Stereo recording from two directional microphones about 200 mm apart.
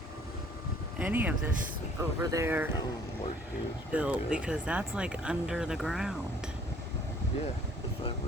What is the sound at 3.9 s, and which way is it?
Speech, 5° right (ahead or behind).